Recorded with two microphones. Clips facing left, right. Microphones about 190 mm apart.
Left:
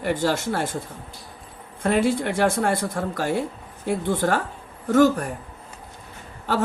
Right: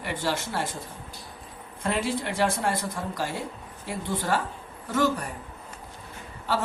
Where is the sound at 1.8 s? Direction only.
55° left (ahead or behind).